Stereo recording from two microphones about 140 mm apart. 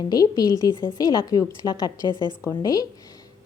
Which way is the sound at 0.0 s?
30° left (ahead or behind).